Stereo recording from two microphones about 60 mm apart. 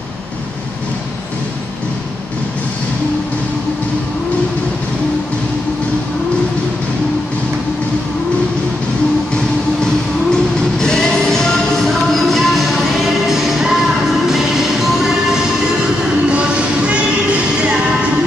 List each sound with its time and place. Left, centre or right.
10.3 s music: centre
16.3 s music: centre